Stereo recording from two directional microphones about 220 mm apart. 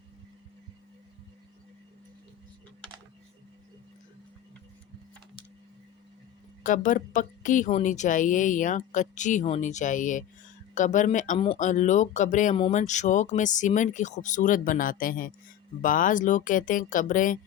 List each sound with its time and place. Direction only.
6.6 s a woman's voice: 35° left (ahead or behind)